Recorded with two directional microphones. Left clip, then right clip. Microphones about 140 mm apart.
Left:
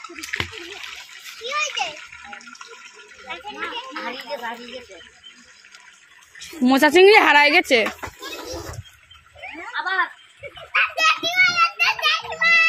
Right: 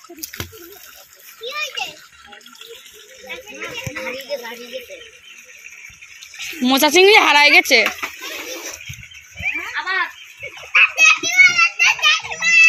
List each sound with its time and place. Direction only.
1.4 s a child's voice: 5° left (ahead or behind)
3.9 s a child's voice: 10° left (ahead or behind)
6.6 s speech: 15° left (ahead or behind)
9.8 s a sound: 5° left (ahead or behind)
10.7 s children playing: centre (ahead or behind)